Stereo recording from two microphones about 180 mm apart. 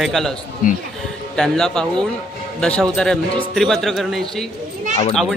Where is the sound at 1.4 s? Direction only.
5° left (ahead or behind).